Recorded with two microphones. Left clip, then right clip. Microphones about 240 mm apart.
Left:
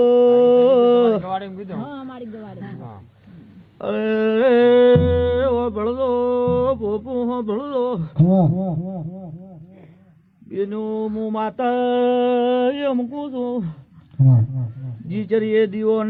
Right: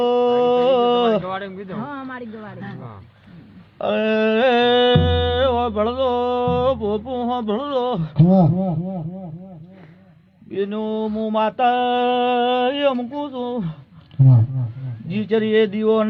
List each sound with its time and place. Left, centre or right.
0.0 s a sound: right
1.3 s a sound: right
3.8 s music: right
8.1 s speech: centre
10.5 s mantra: right
14.2 s speech: centre
15.1 s mantra: right